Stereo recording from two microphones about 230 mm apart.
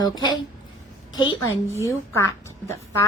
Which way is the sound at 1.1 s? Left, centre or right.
Centre.